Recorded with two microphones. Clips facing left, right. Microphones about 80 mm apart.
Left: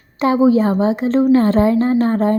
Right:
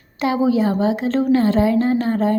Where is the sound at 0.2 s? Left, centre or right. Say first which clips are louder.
Left 4 dB; left.